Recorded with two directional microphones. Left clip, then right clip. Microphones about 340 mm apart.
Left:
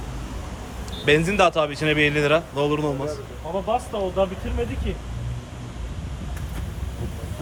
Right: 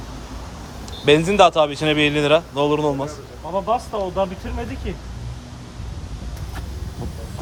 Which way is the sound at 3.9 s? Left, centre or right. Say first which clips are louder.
Right 2 dB; right.